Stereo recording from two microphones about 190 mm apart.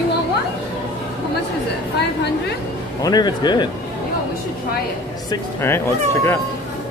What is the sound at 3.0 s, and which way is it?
Speech, 20° left (ahead or behind).